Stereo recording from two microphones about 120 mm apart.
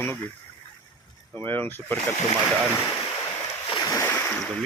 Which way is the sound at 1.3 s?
15° left (ahead or behind).